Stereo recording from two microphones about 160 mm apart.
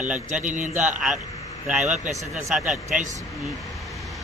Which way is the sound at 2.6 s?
50° right (ahead or behind).